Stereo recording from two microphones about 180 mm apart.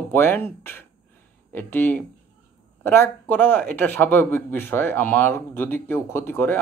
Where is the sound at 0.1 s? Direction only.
10° left (ahead or behind).